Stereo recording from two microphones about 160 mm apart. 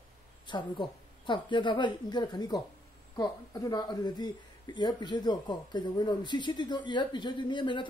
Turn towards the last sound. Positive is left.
turn(degrees=30)  # may be behind; listen again after turning